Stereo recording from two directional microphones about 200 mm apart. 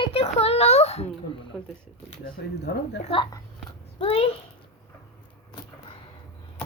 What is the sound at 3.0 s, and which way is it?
A child's voice, 25° left (ahead or behind).